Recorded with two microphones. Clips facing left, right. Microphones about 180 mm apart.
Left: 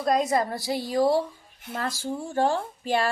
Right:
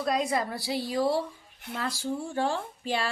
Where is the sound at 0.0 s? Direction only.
40° left (ahead or behind).